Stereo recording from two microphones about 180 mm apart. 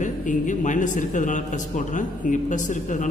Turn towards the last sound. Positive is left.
turn(degrees=45)  # may be behind; listen again after turning